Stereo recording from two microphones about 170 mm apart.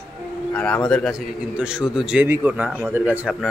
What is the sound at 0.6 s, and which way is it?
A man's voice, 5° left (ahead or behind).